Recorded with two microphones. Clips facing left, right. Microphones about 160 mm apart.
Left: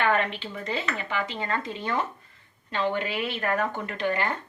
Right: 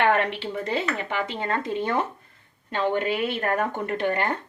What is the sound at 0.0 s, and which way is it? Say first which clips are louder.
Speech: right 3 dB; 70° right (ahead or behind).